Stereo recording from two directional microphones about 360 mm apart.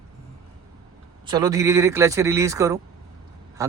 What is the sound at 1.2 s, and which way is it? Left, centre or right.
Speech, centre.